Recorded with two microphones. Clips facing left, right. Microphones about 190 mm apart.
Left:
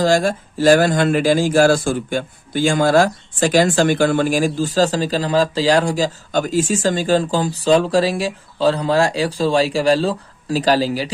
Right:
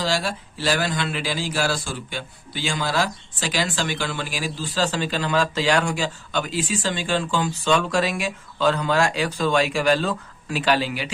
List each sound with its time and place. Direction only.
0.0 s speech: 45° left (ahead or behind)